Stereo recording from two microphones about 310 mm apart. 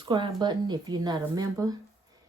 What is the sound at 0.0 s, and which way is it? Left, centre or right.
Speech, centre.